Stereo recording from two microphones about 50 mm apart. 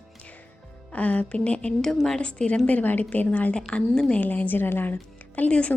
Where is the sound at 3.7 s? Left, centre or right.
Centre.